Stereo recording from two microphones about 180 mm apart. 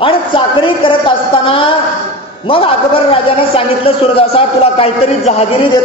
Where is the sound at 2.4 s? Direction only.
30° left (ahead or behind).